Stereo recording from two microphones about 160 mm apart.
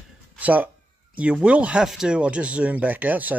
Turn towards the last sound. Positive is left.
turn(degrees=-10)  # may be behind; listen again after turning